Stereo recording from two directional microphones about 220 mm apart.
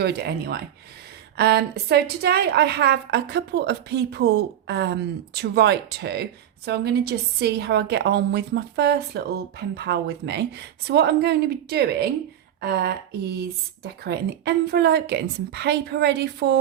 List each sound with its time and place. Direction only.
0.0 s a woman's voice: 50° right (ahead or behind)